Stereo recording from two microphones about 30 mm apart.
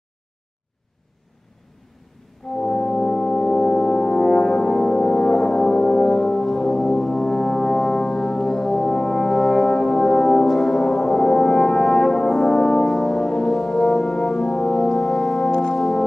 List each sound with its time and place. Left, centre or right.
2.5 s brass instrument: left
15.7 s music: centre